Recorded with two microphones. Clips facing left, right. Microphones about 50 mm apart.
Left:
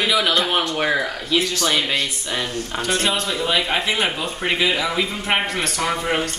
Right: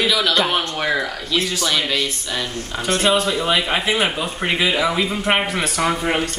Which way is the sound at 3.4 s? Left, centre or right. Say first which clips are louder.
Right 1 dB; centre.